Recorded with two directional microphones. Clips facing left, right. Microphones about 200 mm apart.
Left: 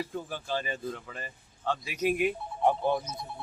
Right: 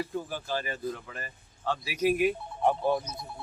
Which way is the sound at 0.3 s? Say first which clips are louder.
Right 1 dB; 10° right (ahead or behind).